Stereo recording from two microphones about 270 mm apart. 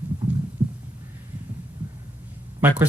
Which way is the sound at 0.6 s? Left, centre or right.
Centre.